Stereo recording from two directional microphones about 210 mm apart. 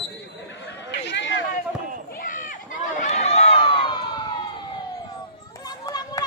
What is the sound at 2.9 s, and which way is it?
Run, 35° left (ahead or behind).